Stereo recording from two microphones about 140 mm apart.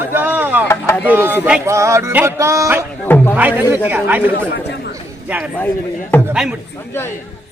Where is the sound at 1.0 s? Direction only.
15° right (ahead or behind).